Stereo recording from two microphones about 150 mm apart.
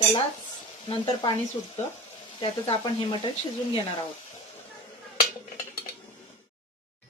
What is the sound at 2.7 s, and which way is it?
Speech, 35° left (ahead or behind).